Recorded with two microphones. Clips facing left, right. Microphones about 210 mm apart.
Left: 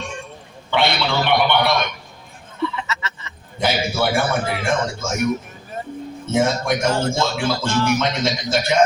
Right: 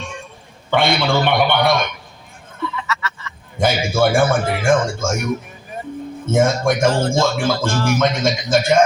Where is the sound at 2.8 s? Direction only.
20° left (ahead or behind).